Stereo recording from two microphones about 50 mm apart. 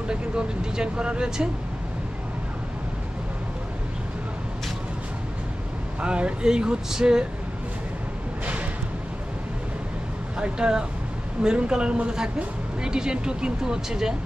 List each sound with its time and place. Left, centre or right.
0.1 s speech: centre
5.9 s speech: right
10.4 s speech: centre